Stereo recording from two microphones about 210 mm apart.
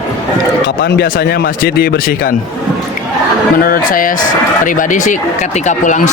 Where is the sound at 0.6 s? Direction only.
55° left (ahead or behind).